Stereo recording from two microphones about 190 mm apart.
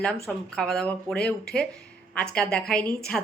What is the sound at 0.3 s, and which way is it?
A woman's voice, 5° left (ahead or behind).